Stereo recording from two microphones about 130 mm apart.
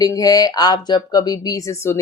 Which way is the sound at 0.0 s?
25° left (ahead or behind).